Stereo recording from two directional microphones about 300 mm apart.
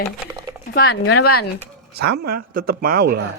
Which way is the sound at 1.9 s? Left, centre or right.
Right.